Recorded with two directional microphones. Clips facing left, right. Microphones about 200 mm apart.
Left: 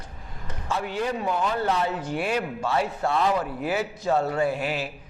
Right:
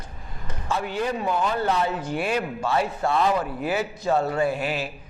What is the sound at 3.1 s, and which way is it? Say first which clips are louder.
Speech: right 2 dB; 35° right (ahead or behind).